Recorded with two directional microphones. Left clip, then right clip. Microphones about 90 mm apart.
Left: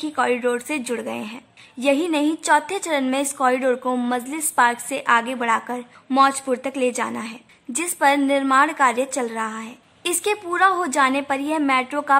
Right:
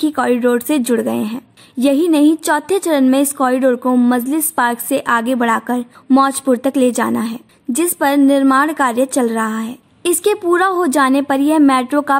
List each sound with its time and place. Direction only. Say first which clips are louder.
0.0 s speech: right 6 dB; 50° right (ahead or behind)
1.8 s a woman's voice: right 7 dB; 40° right (ahead or behind)